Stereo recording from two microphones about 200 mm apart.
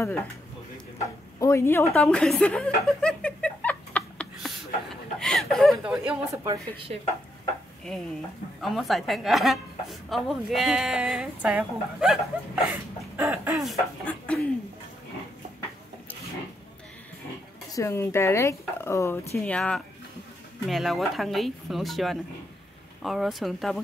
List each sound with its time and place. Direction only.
0.0 s speech: 10° left (ahead or behind)
1.4 s speech: 15° left (ahead or behind)
2.0 s chuckle: 5° left (ahead or behind)
5.2 s a woman's voice: centre (ahead or behind)
6.4 s a woman's voice: 15° right (ahead or behind)
8.5 s a woman's voice: centre (ahead or behind)
17.7 s a woman's voice: 15° left (ahead or behind)